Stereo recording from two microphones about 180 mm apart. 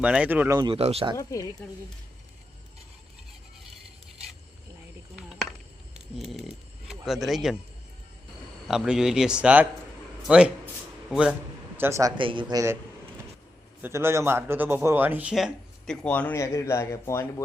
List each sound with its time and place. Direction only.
0.0 s speech: 5° right (ahead or behind)
0.6 s speech: 30° right (ahead or behind)
1.1 s speech: 20° left (ahead or behind)
6.1 s speech: centre (ahead or behind)
8.6 s speech: 5° right (ahead or behind)
11.8 s speech: 15° right (ahead or behind)
13.8 s speech: 15° right (ahead or behind); by 17.4 s 15° left (ahead or behind)